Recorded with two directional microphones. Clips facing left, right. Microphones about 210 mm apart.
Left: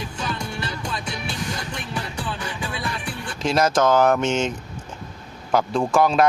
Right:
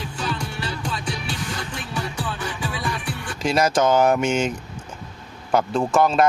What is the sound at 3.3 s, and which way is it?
A man's voice, 5° right (ahead or behind).